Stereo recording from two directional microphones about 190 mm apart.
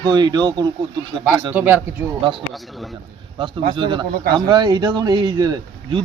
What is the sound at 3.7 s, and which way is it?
A man's voice, 25° right (ahead or behind).